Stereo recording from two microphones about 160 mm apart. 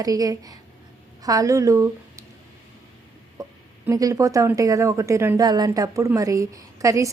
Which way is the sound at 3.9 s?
20° right (ahead or behind).